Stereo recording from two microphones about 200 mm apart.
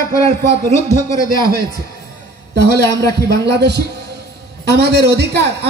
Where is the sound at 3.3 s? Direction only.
55° right (ahead or behind).